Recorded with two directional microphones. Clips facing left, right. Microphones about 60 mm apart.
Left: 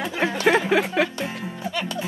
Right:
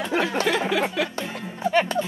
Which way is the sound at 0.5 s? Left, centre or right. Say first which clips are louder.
Left 4 dB; left.